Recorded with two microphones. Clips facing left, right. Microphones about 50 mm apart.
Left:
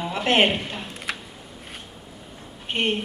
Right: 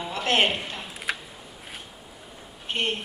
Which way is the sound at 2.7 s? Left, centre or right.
Centre.